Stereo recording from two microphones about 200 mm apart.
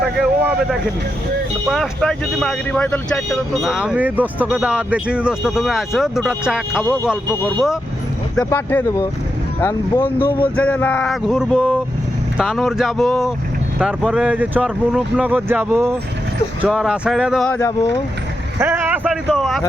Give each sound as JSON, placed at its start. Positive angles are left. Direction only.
{"t": 0.2, "sound": "speech", "side_deg": -5}
{"t": 8.4, "sound": "speech", "side_deg": 10}
{"t": 16.6, "sound": "speech", "side_deg": 0}
{"t": 17.6, "sound": "speech", "side_deg": 15}
{"t": 18.6, "sound": "speech", "side_deg": -10}